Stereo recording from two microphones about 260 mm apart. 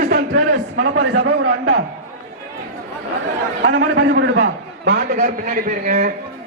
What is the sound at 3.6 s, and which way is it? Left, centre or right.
A man's voice, right.